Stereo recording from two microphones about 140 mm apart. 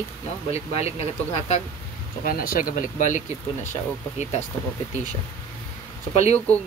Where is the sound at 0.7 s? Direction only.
45° left (ahead or behind).